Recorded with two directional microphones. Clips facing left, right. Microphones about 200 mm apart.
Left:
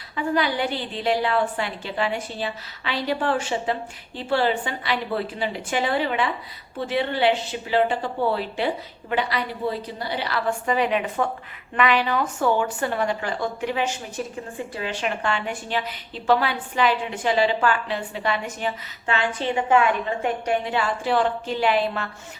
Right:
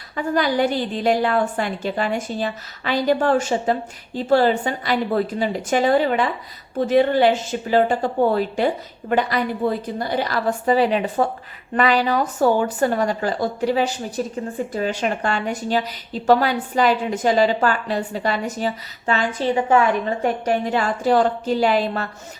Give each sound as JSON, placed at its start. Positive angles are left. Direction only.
{"t": 0.2, "sound": "a woman's voice", "side_deg": -45}